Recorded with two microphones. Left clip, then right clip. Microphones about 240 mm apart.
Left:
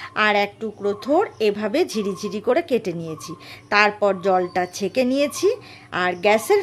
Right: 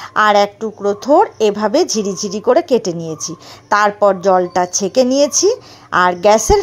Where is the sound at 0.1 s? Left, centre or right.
Centre.